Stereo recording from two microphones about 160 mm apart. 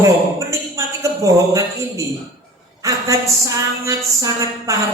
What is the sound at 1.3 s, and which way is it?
A woman's voice, 20° right (ahead or behind).